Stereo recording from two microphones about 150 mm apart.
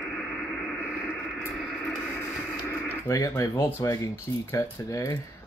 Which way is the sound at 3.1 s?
25° left (ahead or behind).